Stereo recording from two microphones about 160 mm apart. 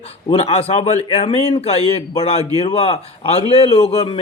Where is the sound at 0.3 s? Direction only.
40° left (ahead or behind).